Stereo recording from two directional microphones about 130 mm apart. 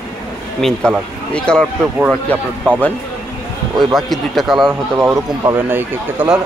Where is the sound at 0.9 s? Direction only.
5° left (ahead or behind).